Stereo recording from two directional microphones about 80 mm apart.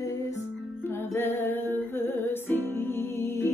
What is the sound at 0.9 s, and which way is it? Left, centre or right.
Music, left.